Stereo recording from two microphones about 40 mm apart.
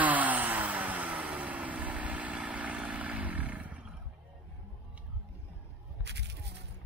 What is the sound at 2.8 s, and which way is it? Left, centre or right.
Vehicle, right.